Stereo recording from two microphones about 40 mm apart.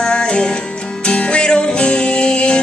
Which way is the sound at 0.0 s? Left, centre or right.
Left.